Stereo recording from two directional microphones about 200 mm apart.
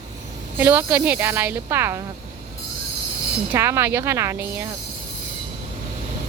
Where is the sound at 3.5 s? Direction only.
15° right (ahead or behind).